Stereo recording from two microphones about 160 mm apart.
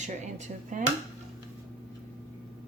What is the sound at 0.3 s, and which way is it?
Speech, 50° right (ahead or behind).